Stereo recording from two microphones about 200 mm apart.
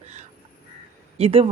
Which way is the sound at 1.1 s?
30° right (ahead or behind).